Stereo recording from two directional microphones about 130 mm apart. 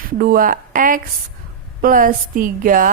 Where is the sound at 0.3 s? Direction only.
90° right.